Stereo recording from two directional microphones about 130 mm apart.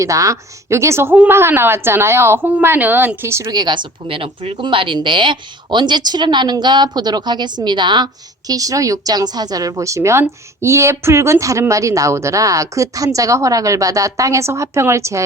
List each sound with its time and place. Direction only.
0.0 s a woman's voice: 25° right (ahead or behind)
3.5 s a woman's voice: 35° right (ahead or behind)